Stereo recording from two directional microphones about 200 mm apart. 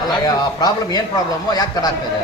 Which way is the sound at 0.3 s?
20° left (ahead or behind).